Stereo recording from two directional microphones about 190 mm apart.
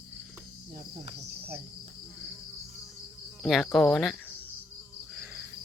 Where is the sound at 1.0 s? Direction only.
35° right (ahead or behind).